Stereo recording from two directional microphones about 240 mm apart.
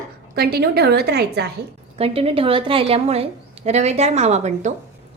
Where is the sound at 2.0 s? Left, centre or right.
Right.